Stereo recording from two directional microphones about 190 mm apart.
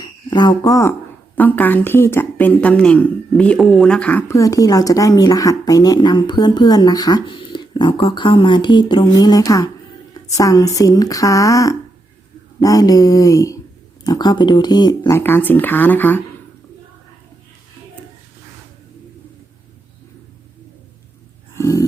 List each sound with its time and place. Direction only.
0.0 s speech: 25° left (ahead or behind)
21.5 s dog: 15° left (ahead or behind)